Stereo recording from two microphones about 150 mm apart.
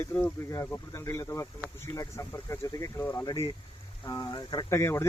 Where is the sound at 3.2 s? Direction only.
25° left (ahead or behind).